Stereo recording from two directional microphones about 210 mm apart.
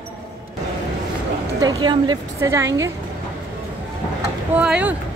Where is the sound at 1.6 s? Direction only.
20° right (ahead or behind).